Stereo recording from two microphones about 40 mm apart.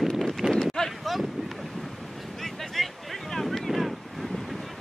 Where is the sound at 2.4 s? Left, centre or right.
Centre.